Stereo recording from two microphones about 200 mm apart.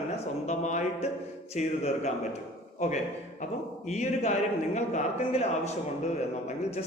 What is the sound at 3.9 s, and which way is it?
A man's voice, 35° left (ahead or behind).